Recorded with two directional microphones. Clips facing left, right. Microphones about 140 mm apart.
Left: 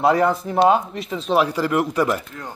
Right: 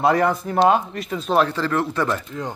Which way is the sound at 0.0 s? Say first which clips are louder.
Left 1 dB; centre (ahead or behind).